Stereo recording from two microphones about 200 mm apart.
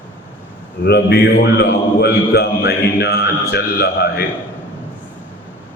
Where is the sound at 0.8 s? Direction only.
55° left (ahead or behind).